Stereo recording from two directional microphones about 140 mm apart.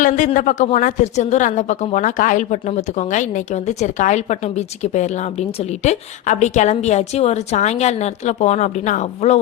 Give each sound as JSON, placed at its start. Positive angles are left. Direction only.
{"t": 0.3, "sound": "a woman's voice", "side_deg": 60}